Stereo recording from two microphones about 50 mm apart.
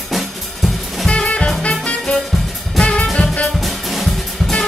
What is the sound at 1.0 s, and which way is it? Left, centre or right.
Music, left.